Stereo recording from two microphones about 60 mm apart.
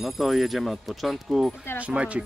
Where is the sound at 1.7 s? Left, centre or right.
Right.